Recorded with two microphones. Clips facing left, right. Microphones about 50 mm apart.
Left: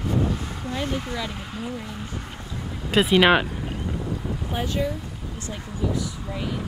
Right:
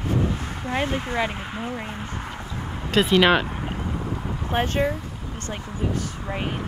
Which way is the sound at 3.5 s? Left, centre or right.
Right.